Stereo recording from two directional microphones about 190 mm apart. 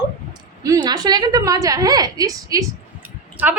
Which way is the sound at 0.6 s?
20° right (ahead or behind).